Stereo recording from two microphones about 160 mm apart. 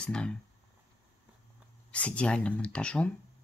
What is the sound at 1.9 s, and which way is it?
Speech, 5° left (ahead or behind).